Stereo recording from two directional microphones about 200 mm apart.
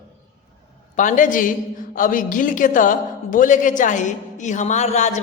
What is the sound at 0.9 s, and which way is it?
A man's voice, 40° left (ahead or behind).